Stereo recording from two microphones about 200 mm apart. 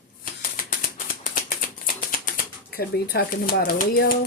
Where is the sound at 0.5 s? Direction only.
45° left (ahead or behind).